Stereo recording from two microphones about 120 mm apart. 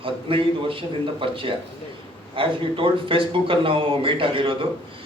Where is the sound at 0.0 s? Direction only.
50° right (ahead or behind).